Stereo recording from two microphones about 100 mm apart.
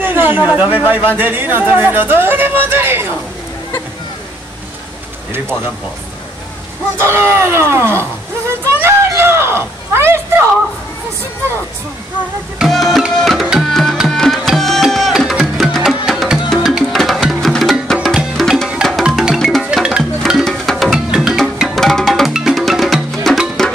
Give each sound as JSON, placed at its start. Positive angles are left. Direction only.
{"t": 0.0, "sound": "speech", "side_deg": -20}
{"t": 7.0, "sound": "speech", "side_deg": -25}
{"t": 8.7, "sound": "a sound", "side_deg": -25}
{"t": 12.5, "sound": "tabla", "side_deg": 0}
{"t": 16.4, "sound": "music", "side_deg": 0}